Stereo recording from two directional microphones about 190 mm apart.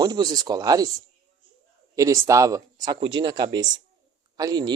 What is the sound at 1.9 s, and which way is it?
Speech, 15° right (ahead or behind).